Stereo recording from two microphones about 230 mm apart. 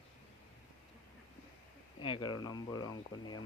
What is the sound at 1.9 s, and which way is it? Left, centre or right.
Speech, left.